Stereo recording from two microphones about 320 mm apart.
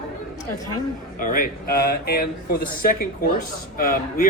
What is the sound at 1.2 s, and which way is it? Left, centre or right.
Speech, left.